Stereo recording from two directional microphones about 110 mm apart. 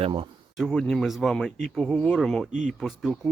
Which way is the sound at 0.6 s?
Centre (ahead or behind).